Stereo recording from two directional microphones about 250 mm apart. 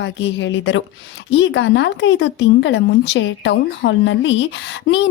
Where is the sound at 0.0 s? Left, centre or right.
Left.